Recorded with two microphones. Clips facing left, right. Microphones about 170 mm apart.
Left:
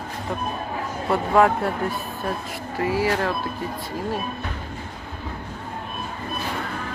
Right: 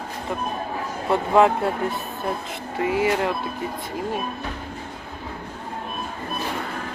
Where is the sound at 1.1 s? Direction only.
20° right (ahead or behind).